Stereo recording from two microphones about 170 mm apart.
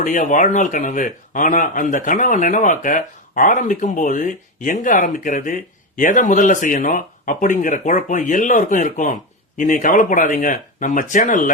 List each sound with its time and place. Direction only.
0.0 s speech: 50° left (ahead or behind)